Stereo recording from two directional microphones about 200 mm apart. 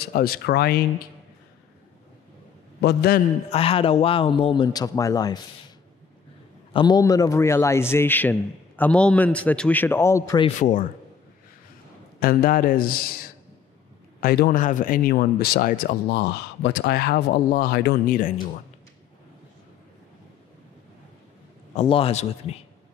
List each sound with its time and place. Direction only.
0.0 s speech: 50° left (ahead or behind)
2.8 s a man's voice: 55° left (ahead or behind)
3.4 s a man's voice: 30° left (ahead or behind)
6.7 s a man's voice: 20° left (ahead or behind)
10.6 s a man's voice: 40° left (ahead or behind)
12.2 s speech: 45° left (ahead or behind)
14.2 s speech: 50° left (ahead or behind)
21.7 s a man's voice: 30° left (ahead or behind)